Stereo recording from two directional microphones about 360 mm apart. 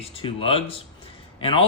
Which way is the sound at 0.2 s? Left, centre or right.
Centre.